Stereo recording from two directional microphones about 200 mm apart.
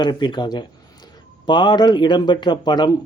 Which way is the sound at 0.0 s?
20° left (ahead or behind).